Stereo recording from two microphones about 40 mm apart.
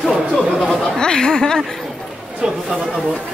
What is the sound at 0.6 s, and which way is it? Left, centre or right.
Speech, centre.